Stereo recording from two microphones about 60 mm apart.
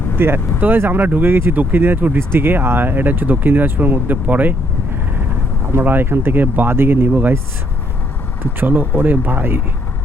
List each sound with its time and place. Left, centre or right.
0.2 s speech: right
5.7 s speech: right
8.6 s speech: right